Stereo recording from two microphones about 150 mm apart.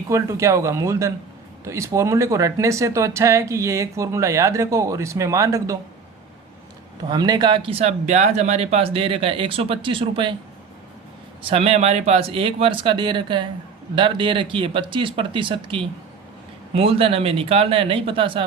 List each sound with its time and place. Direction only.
0.1 s speech: 20° right (ahead or behind)
7.1 s speech: 30° right (ahead or behind)
11.4 s speech: 40° right (ahead or behind)